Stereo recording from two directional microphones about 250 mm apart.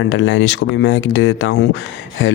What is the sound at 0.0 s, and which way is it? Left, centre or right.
Speech, left.